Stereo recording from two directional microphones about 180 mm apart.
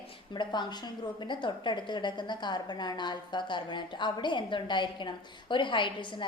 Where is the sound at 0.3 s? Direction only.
25° left (ahead or behind).